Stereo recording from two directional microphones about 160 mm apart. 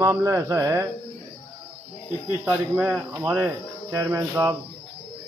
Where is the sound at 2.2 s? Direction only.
10° right (ahead or behind).